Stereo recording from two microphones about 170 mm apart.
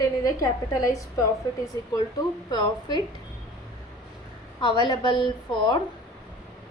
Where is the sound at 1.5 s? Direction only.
25° left (ahead or behind).